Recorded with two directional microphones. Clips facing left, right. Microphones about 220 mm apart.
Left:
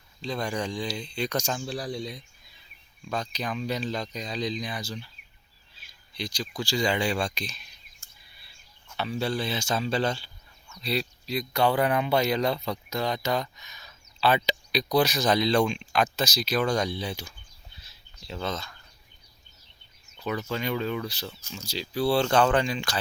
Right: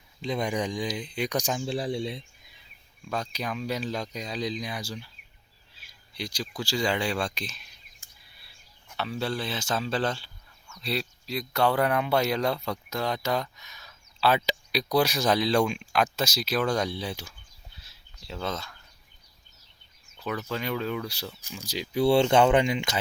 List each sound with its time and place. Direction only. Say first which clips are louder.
0.2 s speech: right 2 dB; 20° right (ahead or behind)
3.1 s speech: even; 10° right (ahead or behind)
5.8 s a sound: left 1 dB; 10° right (ahead or behind)
6.6 s speech: left 1 dB; 5° right (ahead or behind)
8.0 s a sound: even; 15° right (ahead or behind)
9.0 s speech: left 2 dB; centre (ahead or behind)
20.1 s speech: left 1 dB; centre (ahead or behind); by 23.0 s 20° right (ahead or behind)